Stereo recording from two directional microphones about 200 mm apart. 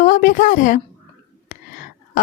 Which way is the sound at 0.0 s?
40° left (ahead or behind).